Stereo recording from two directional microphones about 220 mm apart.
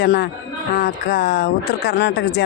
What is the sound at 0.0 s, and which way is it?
Speech, 50° left (ahead or behind).